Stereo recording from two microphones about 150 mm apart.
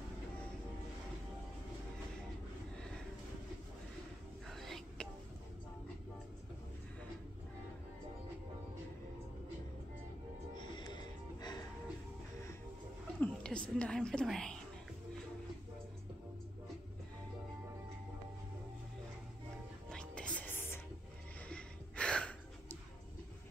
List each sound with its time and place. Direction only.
4.5 s whispering: centre (ahead or behind)
10.6 s music: 30° left (ahead or behind)
13.2 s a woman's voice: 5° left (ahead or behind)
19.9 s music: 5° left (ahead or behind)